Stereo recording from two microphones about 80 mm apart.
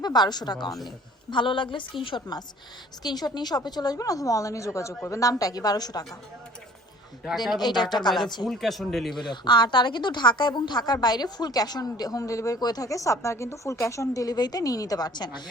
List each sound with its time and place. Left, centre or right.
0.0 s speech: left
0.9 s a woman's voice: left
3.0 s a woman's voice: left
7.6 s speech: left
8.4 s speech: centre
9.1 s speech: left
12.5 s a woman's voice: left